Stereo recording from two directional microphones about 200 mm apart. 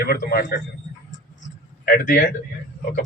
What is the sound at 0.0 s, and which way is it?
Speech, 50° left (ahead or behind).